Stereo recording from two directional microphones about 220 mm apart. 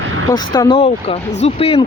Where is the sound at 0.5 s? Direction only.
20° left (ahead or behind).